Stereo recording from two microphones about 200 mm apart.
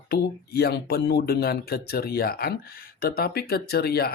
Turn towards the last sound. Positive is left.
turn(degrees=50)  # may be behind; listen again after turning